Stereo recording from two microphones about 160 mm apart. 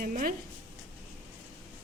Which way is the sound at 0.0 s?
60° right (ahead or behind).